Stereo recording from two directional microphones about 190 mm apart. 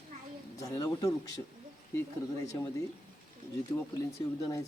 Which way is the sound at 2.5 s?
15° left (ahead or behind).